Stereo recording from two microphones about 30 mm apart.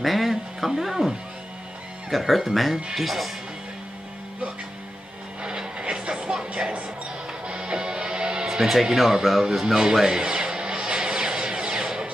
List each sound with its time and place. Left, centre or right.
0.0 s speech: centre
5.4 s vehicle: right
7.4 s music: right
8.5 s speech: centre
10.0 s a sound: right